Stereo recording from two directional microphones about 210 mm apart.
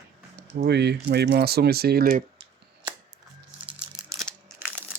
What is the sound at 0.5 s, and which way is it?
Speech, 50° right (ahead or behind).